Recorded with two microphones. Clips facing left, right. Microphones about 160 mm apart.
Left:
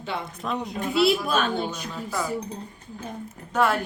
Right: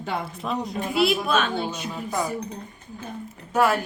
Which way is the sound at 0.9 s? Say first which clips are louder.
Even; 35° left (ahead or behind).